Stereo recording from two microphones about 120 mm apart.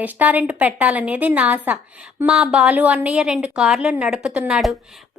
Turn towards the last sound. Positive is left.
turn(degrees=-5)  # may be behind; listen again after turning